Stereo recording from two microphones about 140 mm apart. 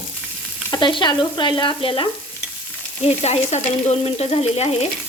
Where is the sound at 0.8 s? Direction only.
35° left (ahead or behind).